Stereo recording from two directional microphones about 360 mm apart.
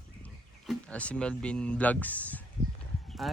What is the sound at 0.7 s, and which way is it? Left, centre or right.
Speech, centre.